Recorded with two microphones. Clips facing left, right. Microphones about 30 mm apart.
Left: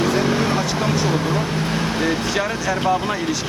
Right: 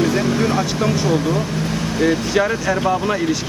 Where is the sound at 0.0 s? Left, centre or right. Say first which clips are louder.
Right 1 dB; centre.